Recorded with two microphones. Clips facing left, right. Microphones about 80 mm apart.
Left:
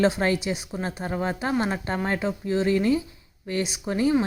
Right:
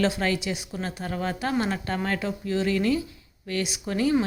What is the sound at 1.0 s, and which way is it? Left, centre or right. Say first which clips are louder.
Speech: left 1 dB; left.